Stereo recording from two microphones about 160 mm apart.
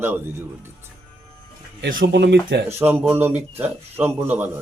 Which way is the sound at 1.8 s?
90° right.